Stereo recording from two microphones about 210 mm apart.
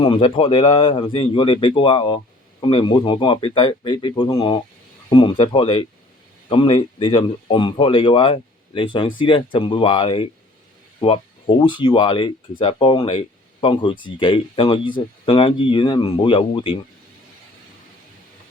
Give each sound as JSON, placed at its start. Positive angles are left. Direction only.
{"t": 0.0, "sound": "speech", "side_deg": 25}